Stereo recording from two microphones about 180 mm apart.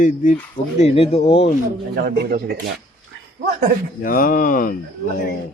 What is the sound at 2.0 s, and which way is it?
Speech, 60° right (ahead or behind).